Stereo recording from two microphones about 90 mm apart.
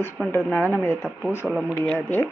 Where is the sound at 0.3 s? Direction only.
25° left (ahead or behind).